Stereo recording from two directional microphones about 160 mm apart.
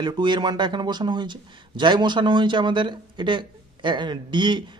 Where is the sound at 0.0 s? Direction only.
25° right (ahead or behind).